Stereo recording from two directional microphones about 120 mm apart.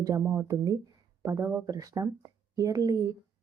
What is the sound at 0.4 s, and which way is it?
A woman's voice, 25° right (ahead or behind).